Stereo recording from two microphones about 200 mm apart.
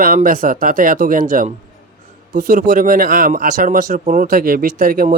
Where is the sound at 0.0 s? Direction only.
45° right (ahead or behind).